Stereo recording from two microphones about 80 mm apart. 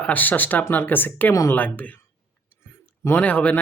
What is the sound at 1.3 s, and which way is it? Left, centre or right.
Speech, left.